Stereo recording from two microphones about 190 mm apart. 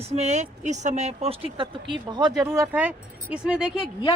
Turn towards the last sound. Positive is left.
turn(degrees=-5)  # may be behind; listen again after turning